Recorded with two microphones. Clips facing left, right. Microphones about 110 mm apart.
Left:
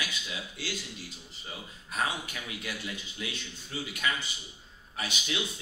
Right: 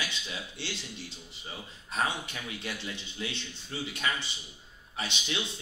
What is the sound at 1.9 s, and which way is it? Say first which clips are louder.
Speech: right 1 dB; 30° right (ahead or behind).